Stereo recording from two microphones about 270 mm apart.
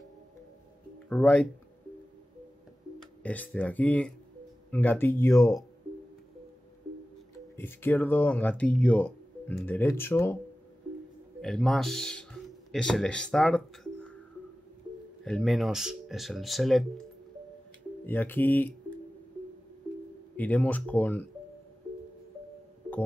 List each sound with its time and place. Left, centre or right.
1.0 s speech: centre
3.0 s speech: centre
7.3 s speech: centre
11.4 s speech: centre
15.2 s speech: centre
18.0 s speech: centre
20.3 s speech: centre